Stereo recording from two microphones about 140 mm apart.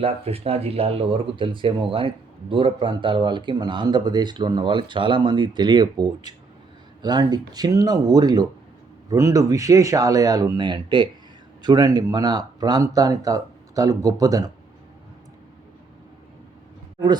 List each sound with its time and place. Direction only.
0.0 s speech: 45° right (ahead or behind); by 14.5 s 25° right (ahead or behind)